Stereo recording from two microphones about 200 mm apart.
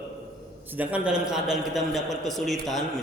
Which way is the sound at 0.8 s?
5° right (ahead or behind).